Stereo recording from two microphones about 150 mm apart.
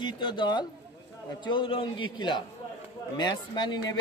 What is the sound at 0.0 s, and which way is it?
A man's voice, 30° left (ahead or behind).